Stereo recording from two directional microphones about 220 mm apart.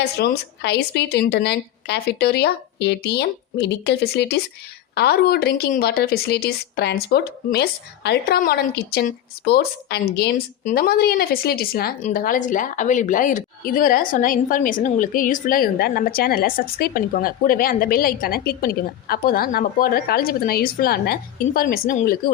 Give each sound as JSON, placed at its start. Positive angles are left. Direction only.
{"t": 0.2, "sound": "a woman's voice", "side_deg": 50}